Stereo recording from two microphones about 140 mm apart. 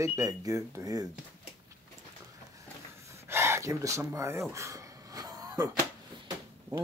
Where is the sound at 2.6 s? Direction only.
20° right (ahead or behind).